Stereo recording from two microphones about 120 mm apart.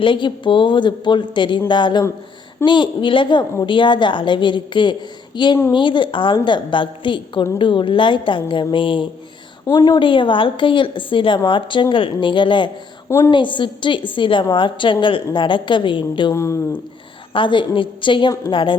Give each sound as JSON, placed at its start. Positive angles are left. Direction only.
{"t": 0.0, "sound": "a woman's voice", "side_deg": 40}
{"t": 9.6, "sound": "a woman's voice", "side_deg": 35}
{"t": 13.1, "sound": "a woman's voice", "side_deg": 20}
{"t": 13.3, "sound": "a woman's voice", "side_deg": 40}
{"t": 16.3, "sound": "speech", "side_deg": 25}
{"t": 17.3, "sound": "a woman's voice", "side_deg": 40}